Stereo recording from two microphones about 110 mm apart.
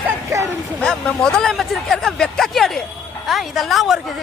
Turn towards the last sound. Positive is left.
turn(degrees=0)  # may be behind; listen again after turning